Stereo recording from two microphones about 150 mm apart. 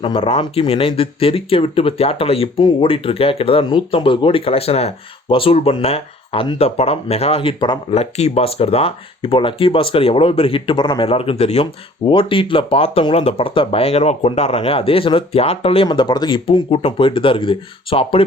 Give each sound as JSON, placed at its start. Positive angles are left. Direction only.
{"t": 0.0, "sound": "speech", "side_deg": 35}
{"t": 7.6, "sound": "speech", "side_deg": 30}
{"t": 7.9, "sound": "speech", "side_deg": 45}